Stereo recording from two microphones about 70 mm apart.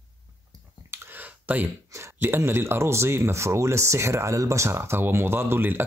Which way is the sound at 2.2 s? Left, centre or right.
Right.